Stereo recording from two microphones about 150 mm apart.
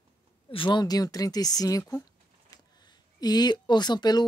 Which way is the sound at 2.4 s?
25° left (ahead or behind).